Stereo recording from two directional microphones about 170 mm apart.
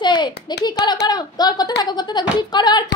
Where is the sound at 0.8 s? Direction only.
25° left (ahead or behind).